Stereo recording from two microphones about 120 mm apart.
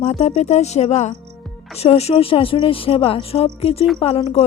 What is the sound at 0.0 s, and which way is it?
A woman's voice, 65° left (ahead or behind).